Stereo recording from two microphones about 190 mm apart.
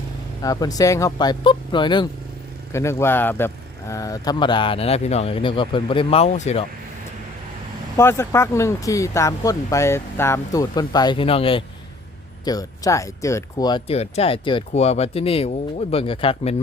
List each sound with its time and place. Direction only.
0.4 s speech: 20° left (ahead or behind)
2.7 s speech: 15° left (ahead or behind); by 6.7 s 35° left (ahead or behind)
7.9 s speech: 15° left (ahead or behind); by 11.6 s 30° left (ahead or behind)
12.5 s speech: 20° left (ahead or behind)